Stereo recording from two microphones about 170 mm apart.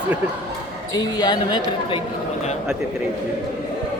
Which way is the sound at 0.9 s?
25° left (ahead or behind).